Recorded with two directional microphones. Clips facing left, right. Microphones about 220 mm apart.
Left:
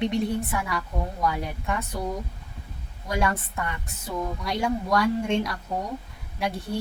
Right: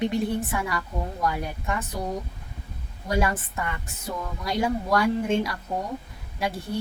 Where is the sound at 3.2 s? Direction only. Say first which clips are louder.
Left 1 dB; centre (ahead or behind).